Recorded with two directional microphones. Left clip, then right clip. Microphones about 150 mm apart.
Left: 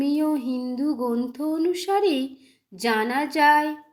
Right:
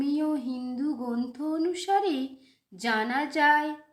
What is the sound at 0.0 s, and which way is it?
Music, 20° left (ahead or behind).